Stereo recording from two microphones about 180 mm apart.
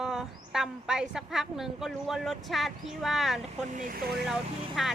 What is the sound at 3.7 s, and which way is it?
Speech, 50° right (ahead or behind).